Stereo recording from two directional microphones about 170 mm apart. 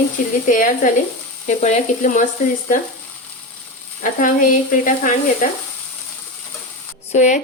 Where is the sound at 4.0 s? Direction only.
50° left (ahead or behind).